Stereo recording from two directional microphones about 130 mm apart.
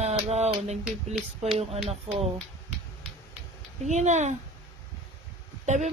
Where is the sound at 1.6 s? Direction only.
50° right (ahead or behind).